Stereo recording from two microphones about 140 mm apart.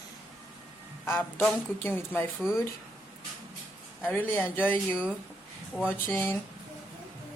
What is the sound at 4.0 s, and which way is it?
Speech, 15° left (ahead or behind).